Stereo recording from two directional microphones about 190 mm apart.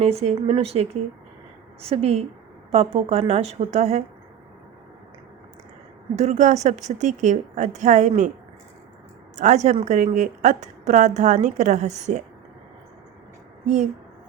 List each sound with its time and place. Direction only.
0.0 s a woman's voice: 35° right (ahead or behind)
6.1 s a woman's voice: 35° right (ahead or behind)
9.3 s a woman's voice: 40° right (ahead or behind)